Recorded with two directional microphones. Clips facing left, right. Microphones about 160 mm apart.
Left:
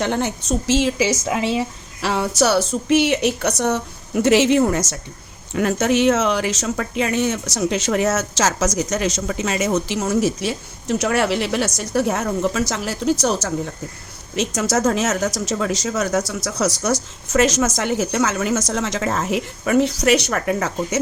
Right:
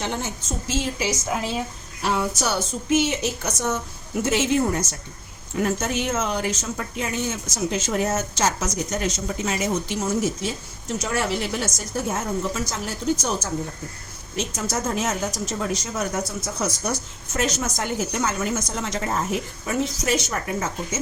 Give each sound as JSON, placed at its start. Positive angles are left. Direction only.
{"t": 0.0, "sound": "a woman's voice", "side_deg": 65}